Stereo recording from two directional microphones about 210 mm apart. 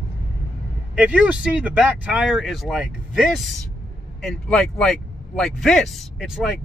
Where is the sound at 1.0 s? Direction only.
5° right (ahead or behind).